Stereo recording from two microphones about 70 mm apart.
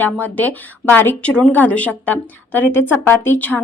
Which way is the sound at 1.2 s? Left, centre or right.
Centre.